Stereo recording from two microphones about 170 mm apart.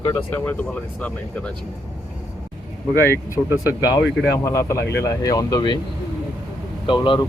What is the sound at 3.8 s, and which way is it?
Speech, 20° left (ahead or behind).